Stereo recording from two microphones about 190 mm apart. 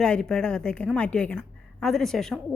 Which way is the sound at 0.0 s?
5° left (ahead or behind).